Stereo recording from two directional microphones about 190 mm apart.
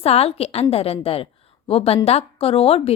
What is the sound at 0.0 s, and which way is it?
Speech, 30° left (ahead or behind).